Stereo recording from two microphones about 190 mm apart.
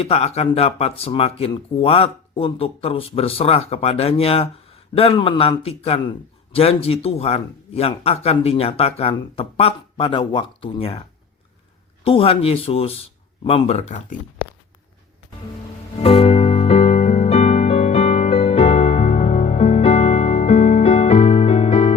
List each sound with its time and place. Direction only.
0.0 s a man's voice: 35° left (ahead or behind)
12.0 s a man's voice: 30° left (ahead or behind)
16.0 s music: 30° left (ahead or behind)